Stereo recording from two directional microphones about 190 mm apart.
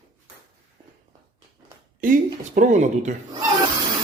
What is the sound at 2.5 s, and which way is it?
Speech, 40° right (ahead or behind).